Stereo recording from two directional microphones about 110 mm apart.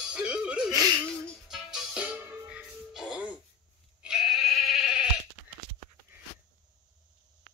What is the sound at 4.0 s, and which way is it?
Sheep, 5° right (ahead or behind).